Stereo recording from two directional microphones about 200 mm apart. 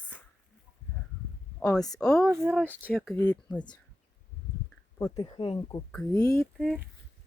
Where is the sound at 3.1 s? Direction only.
10° left (ahead or behind).